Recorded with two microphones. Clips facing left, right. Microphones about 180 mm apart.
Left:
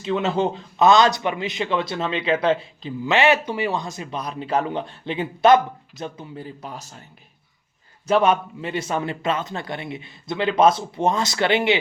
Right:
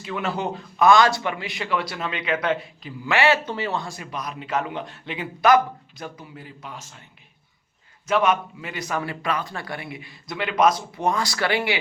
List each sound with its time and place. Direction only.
0.0 s speech: 25° left (ahead or behind)
8.0 s speech: 30° left (ahead or behind)